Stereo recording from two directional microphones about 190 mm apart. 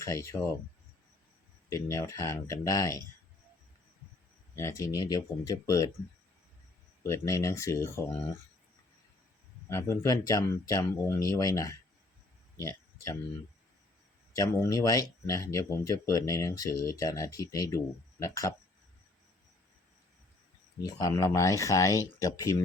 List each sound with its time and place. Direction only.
0.0 s speech: 15° left (ahead or behind)
1.7 s speech: 15° left (ahead or behind)
4.5 s speech: 15° left (ahead or behind)
7.0 s speech: 15° left (ahead or behind)
9.6 s speech: 15° left (ahead or behind)
12.5 s a sound: 15° left (ahead or behind)
14.3 s speech: 15° left (ahead or behind)
20.8 s speech: 15° left (ahead or behind)